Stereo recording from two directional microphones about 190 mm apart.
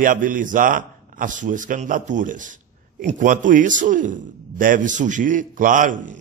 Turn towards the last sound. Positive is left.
turn(degrees=-45)  # may be behind; listen again after turning